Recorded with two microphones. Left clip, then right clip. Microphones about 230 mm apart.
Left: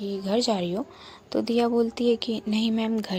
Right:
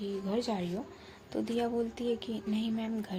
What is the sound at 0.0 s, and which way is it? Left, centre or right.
A woman's voice, left.